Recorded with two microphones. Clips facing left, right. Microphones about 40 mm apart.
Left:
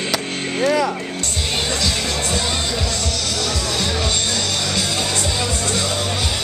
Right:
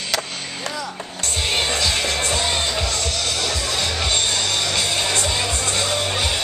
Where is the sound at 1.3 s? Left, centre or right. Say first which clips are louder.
Right 2 dB; centre.